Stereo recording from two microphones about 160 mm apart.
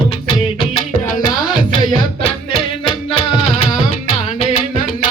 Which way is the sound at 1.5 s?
30° left (ahead or behind).